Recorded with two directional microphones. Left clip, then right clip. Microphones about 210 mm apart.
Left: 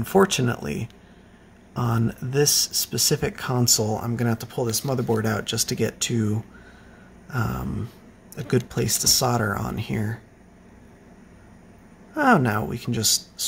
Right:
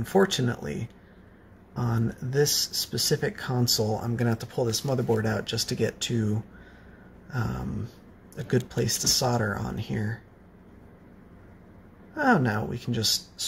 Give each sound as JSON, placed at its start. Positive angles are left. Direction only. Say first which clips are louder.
{"t": 0.0, "sound": "speech", "louder": "left 4 dB", "side_deg": 20}
{"t": 7.2, "sound": "a sound", "louder": "left 5 dB", "side_deg": 25}
{"t": 8.6, "sound": "speech", "louder": "left 4 dB", "side_deg": 25}
{"t": 12.1, "sound": "speech", "louder": "left 4 dB", "side_deg": 25}